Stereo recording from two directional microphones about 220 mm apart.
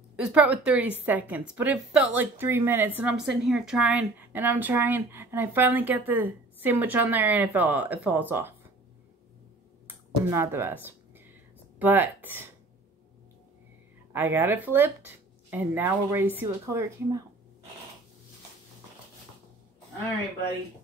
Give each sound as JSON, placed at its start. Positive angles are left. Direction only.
{"t": 0.1, "sound": "a woman's voice", "side_deg": -5}
{"t": 9.8, "sound": "a sound", "side_deg": -10}
{"t": 11.8, "sound": "a woman's voice", "side_deg": -10}
{"t": 14.1, "sound": "a woman's voice", "side_deg": -10}